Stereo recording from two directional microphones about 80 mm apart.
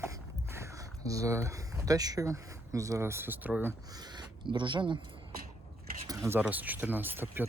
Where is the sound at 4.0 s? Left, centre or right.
Right.